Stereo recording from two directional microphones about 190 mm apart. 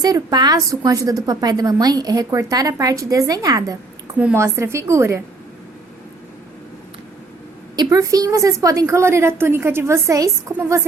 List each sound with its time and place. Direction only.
0.0 s a woman's voice: 20° right (ahead or behind)
7.8 s a woman's voice: 20° right (ahead or behind)